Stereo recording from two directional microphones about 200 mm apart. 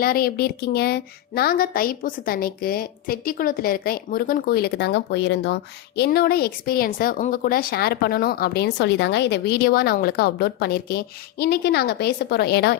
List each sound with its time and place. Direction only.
0.0 s speech: 50° left (ahead or behind)